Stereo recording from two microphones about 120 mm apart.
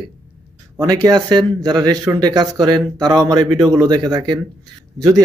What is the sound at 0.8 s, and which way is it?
Speech, 35° right (ahead or behind).